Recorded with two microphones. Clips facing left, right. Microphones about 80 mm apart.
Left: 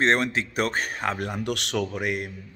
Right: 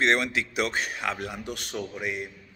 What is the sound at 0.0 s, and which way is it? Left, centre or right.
A man's voice, left.